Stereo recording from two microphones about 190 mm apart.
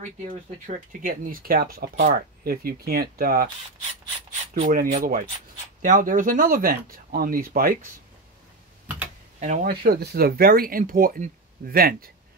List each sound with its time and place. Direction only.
0.3 s speech: 45° right (ahead or behind)
4.6 s speech: 45° right (ahead or behind)
9.4 s speech: 40° right (ahead or behind)